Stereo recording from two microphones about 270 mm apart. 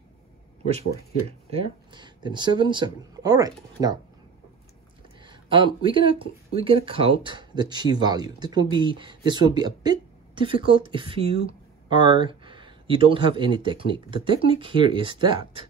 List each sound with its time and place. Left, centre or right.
1.5 s speech: centre
5.2 s speech: centre